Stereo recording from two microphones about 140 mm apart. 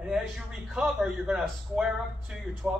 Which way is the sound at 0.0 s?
5° right (ahead or behind).